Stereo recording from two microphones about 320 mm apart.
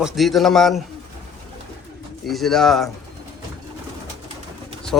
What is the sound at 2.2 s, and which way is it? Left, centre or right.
Speech, centre.